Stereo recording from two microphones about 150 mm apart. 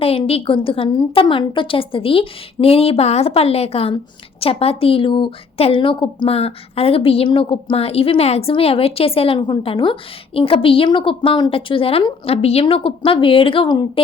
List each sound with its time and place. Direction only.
0.0 s speech: 40° left (ahead or behind)